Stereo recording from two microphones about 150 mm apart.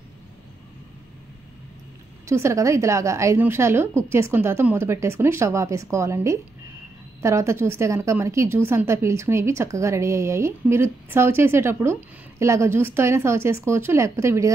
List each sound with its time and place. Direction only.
2.2 s a woman's voice: 20° right (ahead or behind)